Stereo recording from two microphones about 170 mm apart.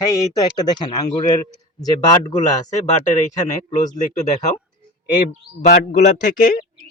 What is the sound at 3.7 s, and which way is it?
Speech, 45° left (ahead or behind).